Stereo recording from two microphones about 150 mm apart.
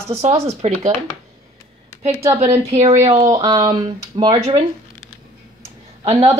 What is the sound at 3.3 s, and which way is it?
Speech, 25° right (ahead or behind).